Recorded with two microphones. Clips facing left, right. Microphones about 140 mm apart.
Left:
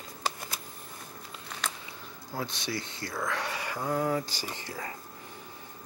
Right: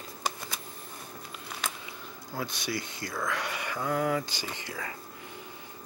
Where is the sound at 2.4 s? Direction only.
25° left (ahead or behind).